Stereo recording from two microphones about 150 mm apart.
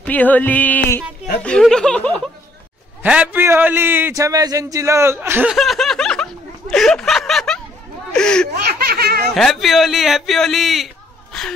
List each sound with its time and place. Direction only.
0.0 s speech: 10° left (ahead or behind)
3.0 s a man's voice: 10° right (ahead or behind)
5.5 s snicker: centre (ahead or behind)
8.1 s a sound: 5° left (ahead or behind)
8.6 s laughter: 90° right
9.3 s a man's voice: centre (ahead or behind)
11.3 s whimper: centre (ahead or behind)